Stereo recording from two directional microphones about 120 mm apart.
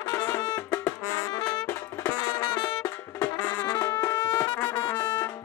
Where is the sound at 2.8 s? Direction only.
15° left (ahead or behind).